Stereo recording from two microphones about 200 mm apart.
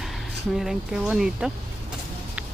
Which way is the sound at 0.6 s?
Centre (ahead or behind).